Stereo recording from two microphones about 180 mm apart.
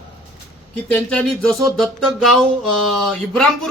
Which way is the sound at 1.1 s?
5° left (ahead or behind).